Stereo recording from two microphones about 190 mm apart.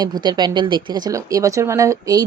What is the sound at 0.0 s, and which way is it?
Speech, 20° right (ahead or behind).